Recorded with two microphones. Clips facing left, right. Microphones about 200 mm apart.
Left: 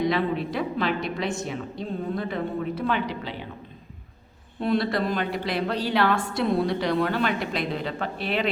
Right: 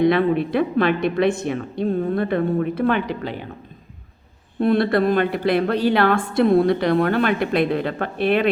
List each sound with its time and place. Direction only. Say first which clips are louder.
0.0 s a woman's voice: right 7 dB; 55° right (ahead or behind)
4.6 s a woman's voice: right 7 dB; 55° right (ahead or behind)